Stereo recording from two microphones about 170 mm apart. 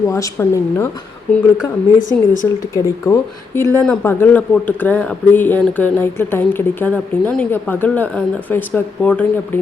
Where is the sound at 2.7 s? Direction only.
15° left (ahead or behind).